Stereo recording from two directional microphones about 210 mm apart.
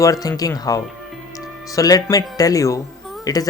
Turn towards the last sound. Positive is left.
turn(degrees=20)  # may be behind; listen again after turning